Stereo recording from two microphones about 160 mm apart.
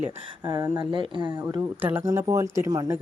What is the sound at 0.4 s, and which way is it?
Speech, 25° right (ahead or behind).